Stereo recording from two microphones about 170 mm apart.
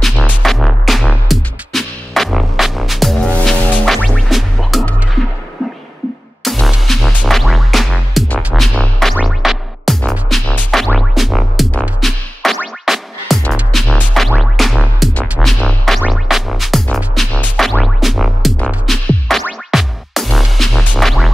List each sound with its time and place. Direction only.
0.0 s music: centre (ahead or behind)
6.4 s music: centre (ahead or behind)